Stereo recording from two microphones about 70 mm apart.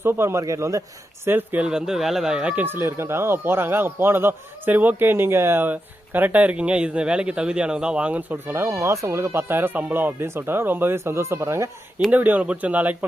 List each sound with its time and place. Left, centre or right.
0.0 s a man's voice: right
1.2 s speech: right
1.6 s speech: centre
2.6 s speech: right
8.5 s speech: right
12.1 s speech: right